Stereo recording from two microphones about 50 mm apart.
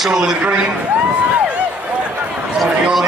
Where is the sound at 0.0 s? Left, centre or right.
Centre.